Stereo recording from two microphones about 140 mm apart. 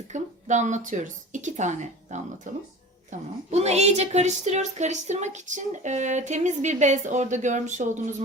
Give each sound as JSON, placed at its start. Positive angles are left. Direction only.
{"t": 0.1, "sound": "a woman's voice", "side_deg": -60}